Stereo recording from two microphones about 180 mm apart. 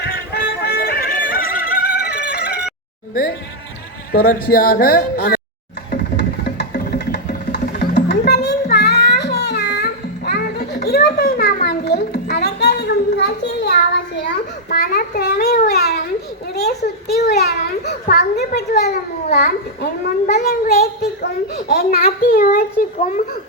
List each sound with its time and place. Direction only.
0.0 s music: 65° left (ahead or behind)
4.1 s speech: 55° left (ahead or behind)
5.9 s music: 65° left (ahead or behind)
7.6 s music: 45° left (ahead or behind)
7.9 s a sound: 70° left (ahead or behind)
8.7 s music: 60° left (ahead or behind)
16.6 s a sound: 65° left (ahead or behind)
17.4 s children playing: 60° left (ahead or behind)
19.3 s babbling: 60° left (ahead or behind)
20.3 s a sound: 55° left (ahead or behind)
21.8 s child singing: 55° left (ahead or behind)